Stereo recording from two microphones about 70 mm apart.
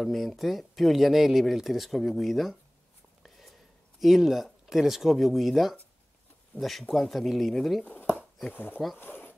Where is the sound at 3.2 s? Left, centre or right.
Centre.